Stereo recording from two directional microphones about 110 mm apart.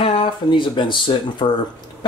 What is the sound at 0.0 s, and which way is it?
Speech, 55° left (ahead or behind).